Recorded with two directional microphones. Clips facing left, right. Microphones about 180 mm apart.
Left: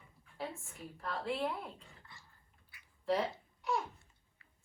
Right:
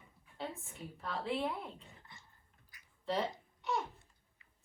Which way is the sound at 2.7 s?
40° right (ahead or behind).